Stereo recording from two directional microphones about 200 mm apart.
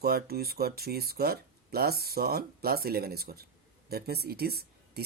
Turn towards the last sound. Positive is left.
turn(degrees=-50)  # may be behind; listen again after turning